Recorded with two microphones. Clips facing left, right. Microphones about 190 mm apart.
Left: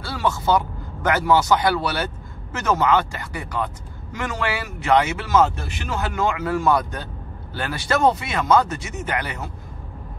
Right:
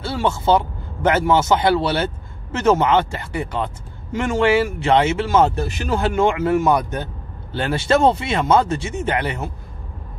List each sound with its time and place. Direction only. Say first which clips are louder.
0.0 s a man's voice: right 3 dB; 25° right (ahead or behind)